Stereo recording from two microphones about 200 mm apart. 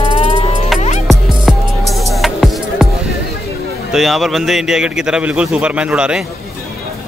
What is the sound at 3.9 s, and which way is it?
A man's voice, centre (ahead or behind).